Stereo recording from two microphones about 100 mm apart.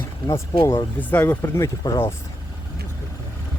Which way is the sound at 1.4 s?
30° left (ahead or behind).